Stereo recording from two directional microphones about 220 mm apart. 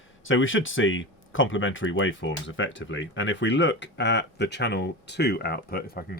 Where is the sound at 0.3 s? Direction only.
60° left (ahead or behind).